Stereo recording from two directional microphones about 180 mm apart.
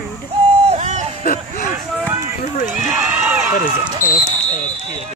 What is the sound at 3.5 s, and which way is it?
Speech, 50° left (ahead or behind).